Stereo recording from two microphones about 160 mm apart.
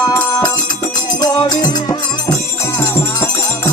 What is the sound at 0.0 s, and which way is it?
Music, 20° left (ahead or behind).